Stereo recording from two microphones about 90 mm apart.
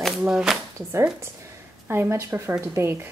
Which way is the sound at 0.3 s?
5° right (ahead or behind).